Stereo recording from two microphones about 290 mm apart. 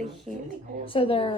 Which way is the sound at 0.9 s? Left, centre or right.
Centre.